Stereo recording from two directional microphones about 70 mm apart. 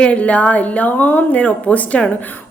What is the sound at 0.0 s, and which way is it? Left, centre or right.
A woman's voice, centre.